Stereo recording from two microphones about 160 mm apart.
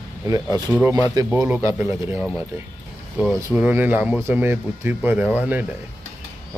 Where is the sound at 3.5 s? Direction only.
10° right (ahead or behind).